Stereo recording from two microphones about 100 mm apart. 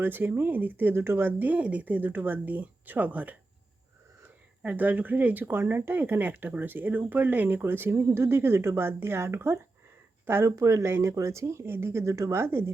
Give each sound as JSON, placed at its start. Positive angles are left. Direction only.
{"t": 0.0, "sound": "speech", "side_deg": -20}
{"t": 4.6, "sound": "speech", "side_deg": -15}